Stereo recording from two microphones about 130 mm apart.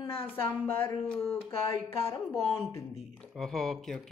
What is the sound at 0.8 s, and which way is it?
Speech, 20° left (ahead or behind).